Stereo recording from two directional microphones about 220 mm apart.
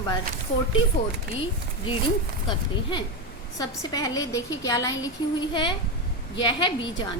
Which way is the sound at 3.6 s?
15° left (ahead or behind).